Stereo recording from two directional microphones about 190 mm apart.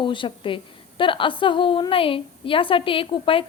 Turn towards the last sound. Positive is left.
turn(degrees=30)  # may be behind; listen again after turning